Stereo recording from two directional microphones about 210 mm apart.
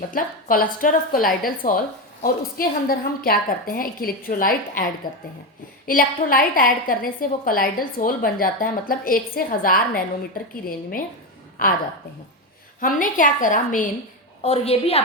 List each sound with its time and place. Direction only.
0.1 s a woman's voice: 40° left (ahead or behind)
12.8 s a woman's voice: 40° left (ahead or behind)